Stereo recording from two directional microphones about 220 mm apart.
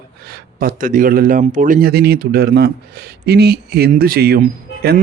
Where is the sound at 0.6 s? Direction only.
35° right (ahead or behind).